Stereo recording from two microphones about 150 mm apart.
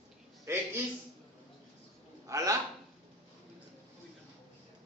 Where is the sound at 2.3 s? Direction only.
20° right (ahead or behind).